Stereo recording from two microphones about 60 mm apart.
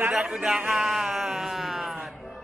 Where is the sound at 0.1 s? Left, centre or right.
Centre.